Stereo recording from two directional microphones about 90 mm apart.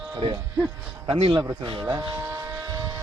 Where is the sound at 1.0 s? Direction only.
85° right.